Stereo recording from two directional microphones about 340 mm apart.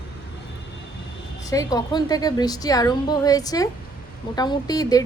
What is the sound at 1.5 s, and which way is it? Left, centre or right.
A woman's voice, centre.